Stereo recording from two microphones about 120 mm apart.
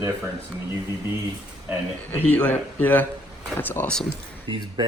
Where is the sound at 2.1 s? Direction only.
15° left (ahead or behind).